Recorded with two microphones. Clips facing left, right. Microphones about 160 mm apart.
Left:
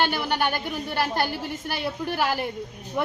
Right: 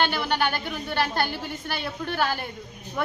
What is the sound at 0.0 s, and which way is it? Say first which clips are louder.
A woman's voice: even; 10° left (ahead or behind).